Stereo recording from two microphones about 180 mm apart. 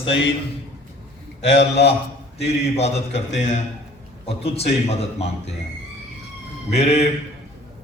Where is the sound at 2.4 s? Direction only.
35° left (ahead or behind).